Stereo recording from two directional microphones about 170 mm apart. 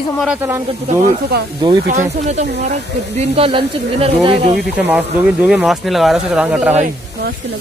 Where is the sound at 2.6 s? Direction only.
40° right (ahead or behind).